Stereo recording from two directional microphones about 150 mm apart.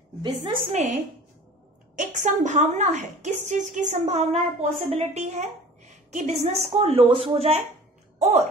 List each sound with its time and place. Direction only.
0.7 s a woman's voice: 50° right (ahead or behind)
2.0 s a woman's voice: 55° right (ahead or behind)